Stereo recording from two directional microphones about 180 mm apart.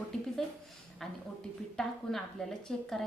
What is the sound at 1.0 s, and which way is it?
A woman's voice, centre (ahead or behind).